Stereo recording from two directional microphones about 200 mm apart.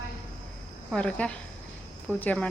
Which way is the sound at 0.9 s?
5° left (ahead or behind).